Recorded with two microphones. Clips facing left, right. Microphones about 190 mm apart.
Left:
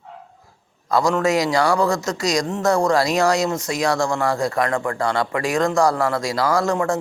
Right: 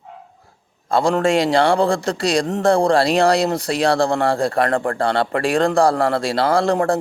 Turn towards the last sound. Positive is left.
turn(degrees=-35)  # may be behind; listen again after turning